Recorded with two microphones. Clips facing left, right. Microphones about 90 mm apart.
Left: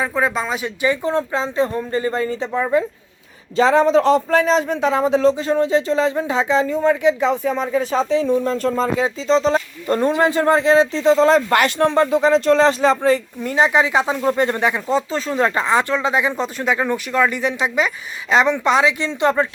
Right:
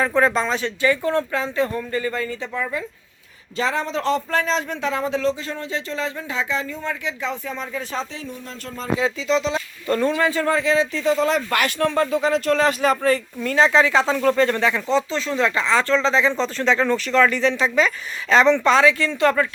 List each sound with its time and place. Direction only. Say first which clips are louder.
0.0 s speech: right 1 dB; 5° left (ahead or behind); by 7.5 s 20° left (ahead or behind)
7.8 s speech: left 8 dB; 10° left (ahead or behind)
8.1 s speech: left 17 dB; 25° left (ahead or behind)
9.2 s speech: left 5 dB; 35° left (ahead or behind)
10.2 s speech: left 5 dB; 25° left (ahead or behind)
15.1 s speech: left 2 dB; 40° left (ahead or behind)
15.6 s speech: left 1 dB; 15° left (ahead or behind)